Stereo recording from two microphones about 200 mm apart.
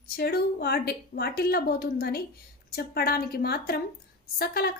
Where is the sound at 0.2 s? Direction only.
50° left (ahead or behind).